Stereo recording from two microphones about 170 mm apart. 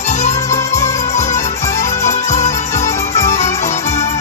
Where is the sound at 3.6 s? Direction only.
40° left (ahead or behind).